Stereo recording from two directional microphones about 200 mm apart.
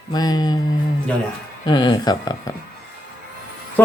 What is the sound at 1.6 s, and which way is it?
Speech, 20° left (ahead or behind).